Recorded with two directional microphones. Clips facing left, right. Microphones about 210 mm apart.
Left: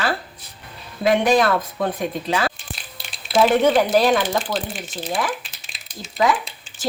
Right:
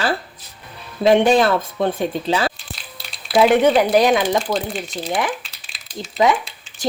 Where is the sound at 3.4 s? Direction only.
15° right (ahead or behind).